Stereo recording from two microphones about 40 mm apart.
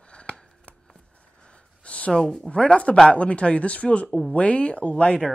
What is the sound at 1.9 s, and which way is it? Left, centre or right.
A man's voice, left.